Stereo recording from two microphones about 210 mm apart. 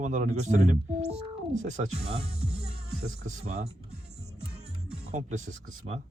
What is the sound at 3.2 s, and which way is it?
Speech, 30° right (ahead or behind).